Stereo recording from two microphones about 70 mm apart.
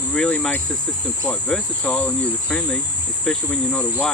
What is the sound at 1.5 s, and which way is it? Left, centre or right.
Speech, centre.